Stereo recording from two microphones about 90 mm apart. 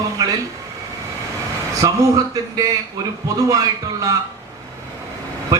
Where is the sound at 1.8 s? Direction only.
40° right (ahead or behind).